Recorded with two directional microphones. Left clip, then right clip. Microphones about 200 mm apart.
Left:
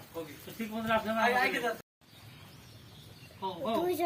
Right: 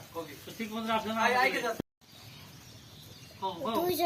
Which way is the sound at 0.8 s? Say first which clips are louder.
Even; 45° left (ahead or behind).